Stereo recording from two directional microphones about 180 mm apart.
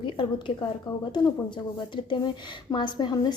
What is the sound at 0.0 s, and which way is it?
Speech, 25° left (ahead or behind).